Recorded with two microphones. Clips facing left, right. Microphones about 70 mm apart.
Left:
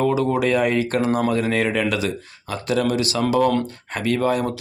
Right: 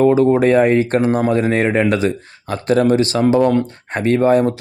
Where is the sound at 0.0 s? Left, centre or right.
Right.